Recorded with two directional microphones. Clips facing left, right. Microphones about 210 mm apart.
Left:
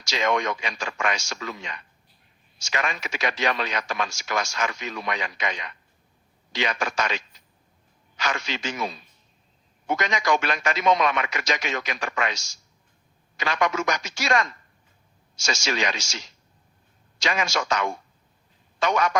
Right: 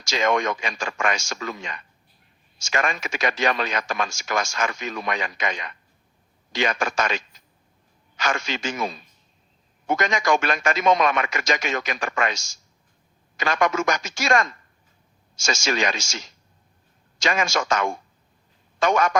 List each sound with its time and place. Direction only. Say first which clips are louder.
0.0 s speech: right 2 dB; 50° right (ahead or behind)